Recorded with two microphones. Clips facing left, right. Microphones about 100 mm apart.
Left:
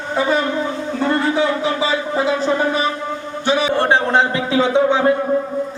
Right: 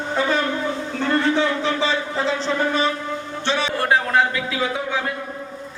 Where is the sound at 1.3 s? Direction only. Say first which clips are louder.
Left 3 dB; 10° left (ahead or behind).